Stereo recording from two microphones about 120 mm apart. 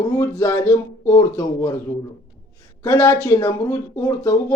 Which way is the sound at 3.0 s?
25° left (ahead or behind).